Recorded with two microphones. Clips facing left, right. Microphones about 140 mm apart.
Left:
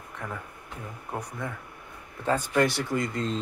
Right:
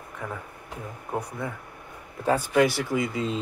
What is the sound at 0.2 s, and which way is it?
Speech, 5° right (ahead or behind).